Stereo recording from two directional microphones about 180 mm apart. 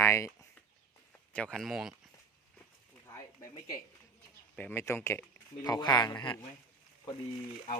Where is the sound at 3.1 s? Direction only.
15° left (ahead or behind).